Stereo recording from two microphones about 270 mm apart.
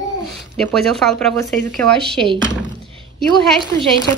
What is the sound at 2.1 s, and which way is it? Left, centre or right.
Speech, centre.